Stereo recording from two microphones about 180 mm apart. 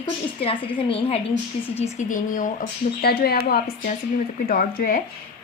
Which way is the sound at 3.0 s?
60° left (ahead or behind).